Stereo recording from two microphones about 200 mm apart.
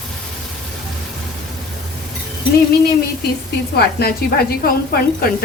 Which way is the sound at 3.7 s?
50° left (ahead or behind).